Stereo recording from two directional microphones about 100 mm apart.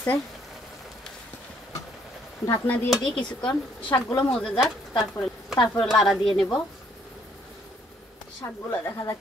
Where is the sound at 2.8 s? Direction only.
5° left (ahead or behind).